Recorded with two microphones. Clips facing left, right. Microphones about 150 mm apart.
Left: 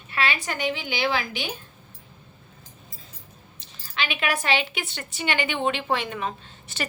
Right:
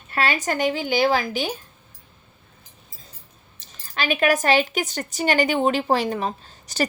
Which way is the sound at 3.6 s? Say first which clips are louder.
Right 3 dB; 45° right (ahead or behind).